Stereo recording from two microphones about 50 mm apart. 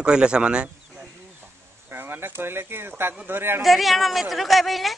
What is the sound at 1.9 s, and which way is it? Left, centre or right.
Speech, right.